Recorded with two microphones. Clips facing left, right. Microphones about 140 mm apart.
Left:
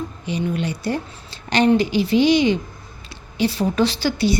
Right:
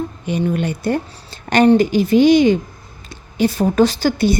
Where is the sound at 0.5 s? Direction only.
50° right (ahead or behind).